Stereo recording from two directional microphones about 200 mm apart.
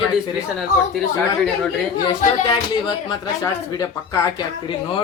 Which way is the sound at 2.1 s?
25° left (ahead or behind).